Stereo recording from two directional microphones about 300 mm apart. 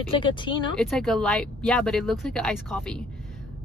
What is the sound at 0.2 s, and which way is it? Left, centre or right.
Speech, centre.